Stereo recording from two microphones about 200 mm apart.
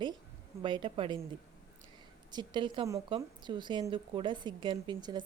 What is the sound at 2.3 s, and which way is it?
Speech, 20° right (ahead or behind).